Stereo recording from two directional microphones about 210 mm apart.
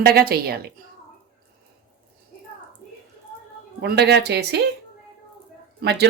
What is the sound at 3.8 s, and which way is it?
Speech, 50° right (ahead or behind).